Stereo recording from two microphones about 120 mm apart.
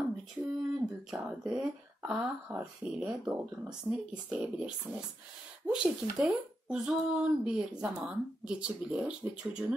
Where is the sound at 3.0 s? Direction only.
10° right (ahead or behind).